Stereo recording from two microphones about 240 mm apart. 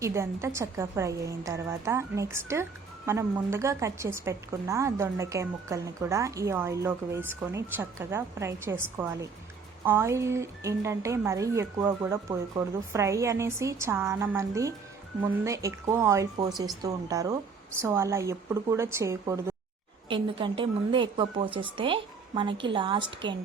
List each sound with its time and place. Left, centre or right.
0.0 s a woman's voice: centre